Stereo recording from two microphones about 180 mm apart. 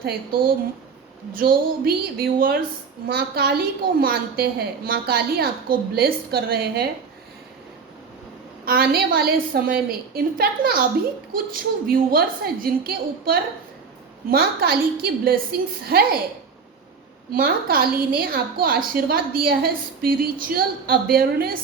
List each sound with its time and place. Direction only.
0.0 s a woman's voice: 55° right (ahead or behind)
8.6 s a woman's voice: 55° right (ahead or behind)
17.3 s a woman's voice: 55° right (ahead or behind)